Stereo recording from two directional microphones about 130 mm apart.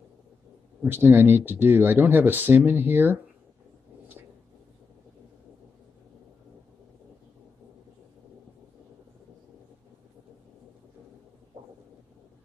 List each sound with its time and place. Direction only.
0.8 s speech: 15° right (ahead or behind)